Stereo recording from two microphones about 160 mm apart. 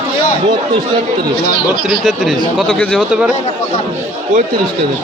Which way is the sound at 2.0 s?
Centre (ahead or behind).